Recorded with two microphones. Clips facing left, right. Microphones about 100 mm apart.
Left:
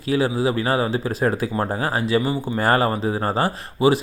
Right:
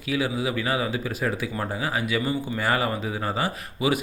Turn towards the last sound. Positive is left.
turn(degrees=35)  # may be behind; listen again after turning